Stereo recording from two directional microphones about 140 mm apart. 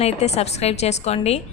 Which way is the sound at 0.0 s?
50° left (ahead or behind).